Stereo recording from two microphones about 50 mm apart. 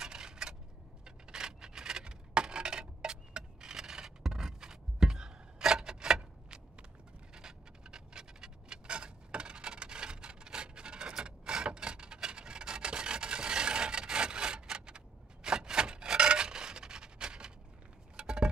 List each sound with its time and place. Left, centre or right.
0.0 s a sound: centre
11.2 s rub: centre
18.1 s chink: centre